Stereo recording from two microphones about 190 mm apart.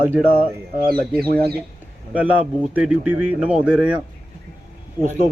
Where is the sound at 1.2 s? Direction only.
55° right (ahead or behind).